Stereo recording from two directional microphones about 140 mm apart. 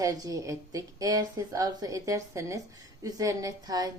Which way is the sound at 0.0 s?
25° right (ahead or behind).